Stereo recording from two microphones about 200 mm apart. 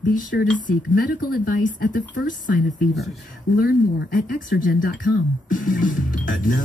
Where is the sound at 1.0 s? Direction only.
45° left (ahead or behind).